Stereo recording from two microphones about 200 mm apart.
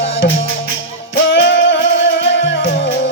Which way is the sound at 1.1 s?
65° left (ahead or behind).